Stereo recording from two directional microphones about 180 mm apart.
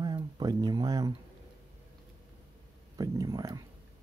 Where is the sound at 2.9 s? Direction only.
20° right (ahead or behind).